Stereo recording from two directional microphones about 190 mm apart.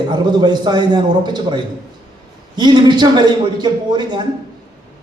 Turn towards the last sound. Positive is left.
turn(degrees=-25)  # may be behind; listen again after turning